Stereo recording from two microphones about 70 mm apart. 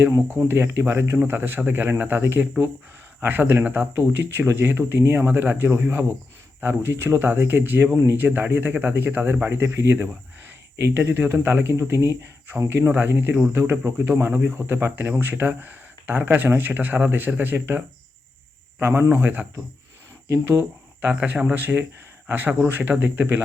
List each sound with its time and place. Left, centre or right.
0.3 s speech: right
1.2 s speech: right
13.5 s speech: right
20.2 s speech: right
20.6 s speech: right